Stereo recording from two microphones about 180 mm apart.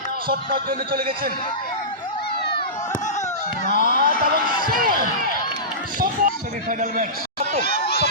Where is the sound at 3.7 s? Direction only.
60° right (ahead or behind).